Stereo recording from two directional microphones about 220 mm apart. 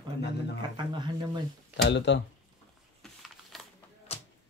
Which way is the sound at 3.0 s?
Centre (ahead or behind).